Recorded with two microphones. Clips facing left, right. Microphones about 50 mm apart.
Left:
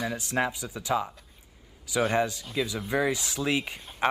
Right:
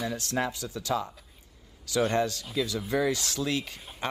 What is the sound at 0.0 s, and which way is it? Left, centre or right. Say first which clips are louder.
Speech: left 2 dB; centre.